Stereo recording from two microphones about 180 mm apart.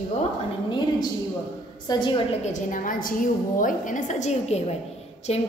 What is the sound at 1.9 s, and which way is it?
Speech, 25° left (ahead or behind).